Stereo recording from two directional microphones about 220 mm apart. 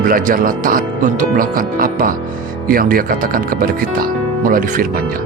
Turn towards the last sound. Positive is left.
turn(degrees=-40)  # may be behind; listen again after turning